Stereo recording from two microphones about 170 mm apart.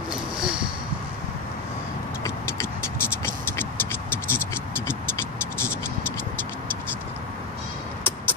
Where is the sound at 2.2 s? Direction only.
15° left (ahead or behind).